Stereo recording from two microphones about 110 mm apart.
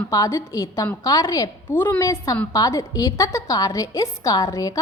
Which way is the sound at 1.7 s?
20° left (ahead or behind).